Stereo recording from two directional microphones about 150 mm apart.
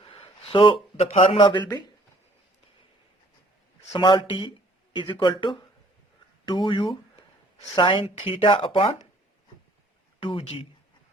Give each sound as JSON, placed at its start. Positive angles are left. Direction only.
{"t": 0.0, "sound": "speech", "side_deg": 40}
{"t": 3.9, "sound": "speech", "side_deg": 35}
{"t": 10.2, "sound": "speech", "side_deg": 40}